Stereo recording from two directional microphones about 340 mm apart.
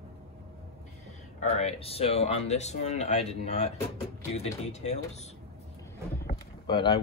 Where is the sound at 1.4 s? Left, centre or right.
Centre.